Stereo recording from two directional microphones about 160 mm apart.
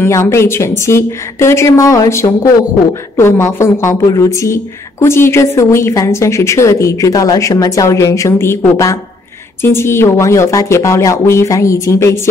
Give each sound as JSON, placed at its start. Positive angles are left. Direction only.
{"t": 0.0, "sound": "a woman's voice", "side_deg": 15}